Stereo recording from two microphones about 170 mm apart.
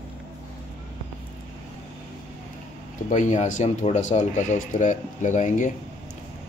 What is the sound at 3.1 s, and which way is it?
Speech, 45° left (ahead or behind).